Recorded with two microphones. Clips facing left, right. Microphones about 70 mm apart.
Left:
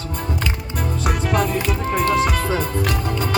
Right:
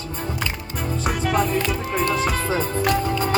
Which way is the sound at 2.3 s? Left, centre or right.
Left.